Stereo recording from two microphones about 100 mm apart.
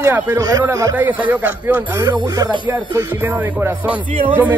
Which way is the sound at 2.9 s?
20° right (ahead or behind).